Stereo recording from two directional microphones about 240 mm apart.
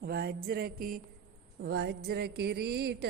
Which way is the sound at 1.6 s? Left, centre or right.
Right.